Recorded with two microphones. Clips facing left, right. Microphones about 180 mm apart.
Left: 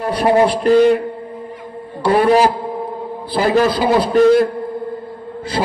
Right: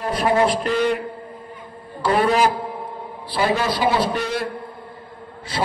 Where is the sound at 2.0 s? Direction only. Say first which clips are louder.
Left 5 dB; 35° left (ahead or behind).